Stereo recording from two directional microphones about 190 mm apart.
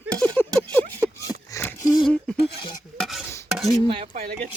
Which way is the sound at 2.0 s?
Centre (ahead or behind).